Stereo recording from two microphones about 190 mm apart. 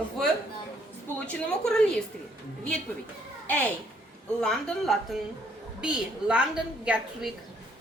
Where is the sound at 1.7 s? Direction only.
5° left (ahead or behind).